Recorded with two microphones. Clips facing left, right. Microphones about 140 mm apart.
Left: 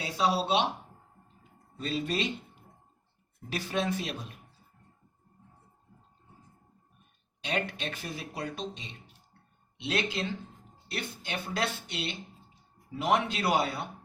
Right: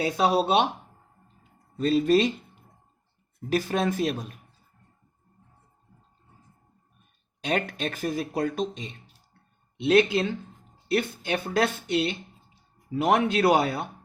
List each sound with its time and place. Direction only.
0.0 s speech: 55° right (ahead or behind)
1.8 s speech: 45° right (ahead or behind)
3.5 s speech: 45° right (ahead or behind)
7.4 s speech: 50° right (ahead or behind)